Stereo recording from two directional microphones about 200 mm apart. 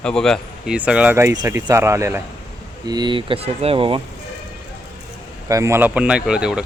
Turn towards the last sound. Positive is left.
turn(degrees=-5)  # may be behind; listen again after turning